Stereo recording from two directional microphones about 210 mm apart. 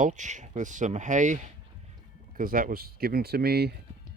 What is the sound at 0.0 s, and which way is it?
Speech, 35° right (ahead or behind).